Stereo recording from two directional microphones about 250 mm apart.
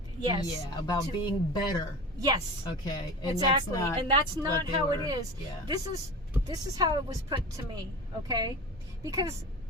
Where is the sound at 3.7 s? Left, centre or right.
Centre.